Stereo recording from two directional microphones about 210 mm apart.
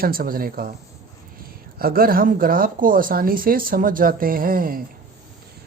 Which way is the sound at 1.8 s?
45° right (ahead or behind).